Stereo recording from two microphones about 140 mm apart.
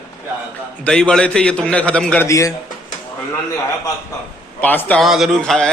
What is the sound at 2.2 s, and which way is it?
Speech, 25° left (ahead or behind).